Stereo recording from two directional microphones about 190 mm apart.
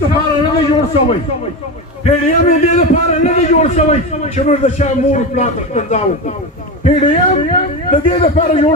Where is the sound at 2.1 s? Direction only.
35° left (ahead or behind).